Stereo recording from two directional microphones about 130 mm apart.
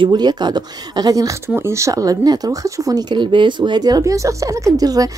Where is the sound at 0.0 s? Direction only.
35° right (ahead or behind).